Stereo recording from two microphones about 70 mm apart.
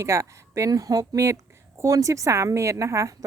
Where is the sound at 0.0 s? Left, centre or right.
Right.